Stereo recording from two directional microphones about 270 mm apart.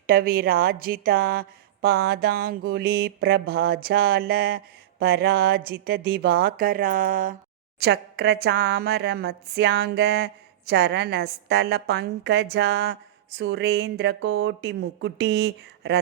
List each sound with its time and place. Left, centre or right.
0.1 s speech: right